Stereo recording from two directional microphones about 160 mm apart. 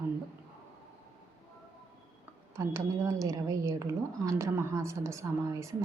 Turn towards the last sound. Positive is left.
turn(degrees=-20)  # may be behind; listen again after turning